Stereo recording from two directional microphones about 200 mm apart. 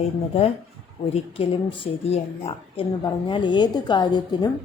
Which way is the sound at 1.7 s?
25° left (ahead or behind).